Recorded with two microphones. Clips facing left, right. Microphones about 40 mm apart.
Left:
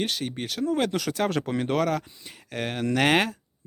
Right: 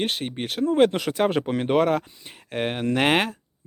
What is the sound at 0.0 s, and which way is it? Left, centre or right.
Speech, right.